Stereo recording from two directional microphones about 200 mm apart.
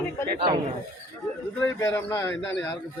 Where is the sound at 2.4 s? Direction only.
65° left (ahead or behind).